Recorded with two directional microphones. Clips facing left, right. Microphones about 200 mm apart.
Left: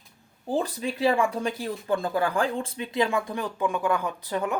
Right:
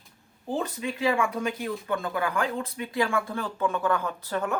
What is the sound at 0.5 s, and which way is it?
Speech, 35° left (ahead or behind).